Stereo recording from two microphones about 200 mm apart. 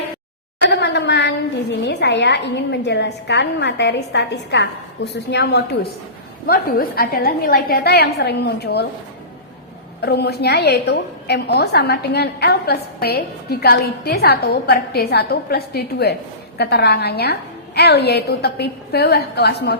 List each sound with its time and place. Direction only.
0.7 s a sound: 55° left (ahead or behind)
1.8 s a woman's voice: 60° left (ahead or behind)
6.5 s a woman's voice: 50° left (ahead or behind)
10.0 s a woman's voice: 55° left (ahead or behind)